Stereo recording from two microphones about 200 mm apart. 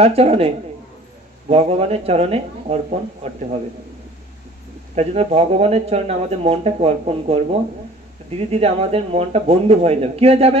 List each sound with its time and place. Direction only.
0.0 s speech: 30° right (ahead or behind)
1.5 s speech: 30° right (ahead or behind)
4.9 s speech: 30° right (ahead or behind)